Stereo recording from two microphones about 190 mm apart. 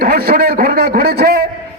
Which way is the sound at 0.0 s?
50° right (ahead or behind).